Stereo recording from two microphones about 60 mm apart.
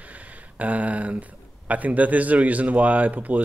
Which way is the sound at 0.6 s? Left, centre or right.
Right.